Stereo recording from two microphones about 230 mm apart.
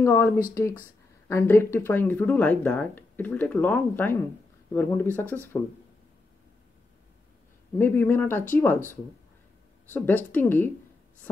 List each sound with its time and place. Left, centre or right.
0.0 s speech: centre
7.7 s speech: centre